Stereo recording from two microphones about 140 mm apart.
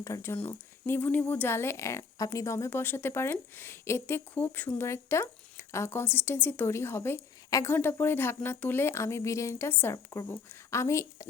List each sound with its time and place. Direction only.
0.0 s a woman's voice: 20° left (ahead or behind)